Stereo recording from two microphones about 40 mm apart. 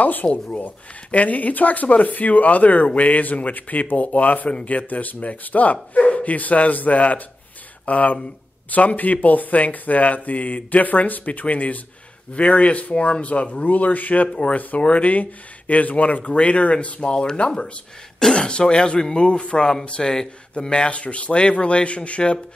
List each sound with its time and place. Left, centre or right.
0.0 s speech: left